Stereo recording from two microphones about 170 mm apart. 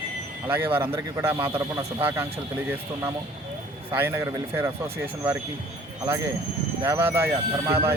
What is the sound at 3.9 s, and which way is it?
Speech, 10° right (ahead or behind).